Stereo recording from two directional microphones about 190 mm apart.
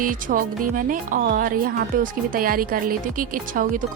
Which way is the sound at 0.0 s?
45° right (ahead or behind).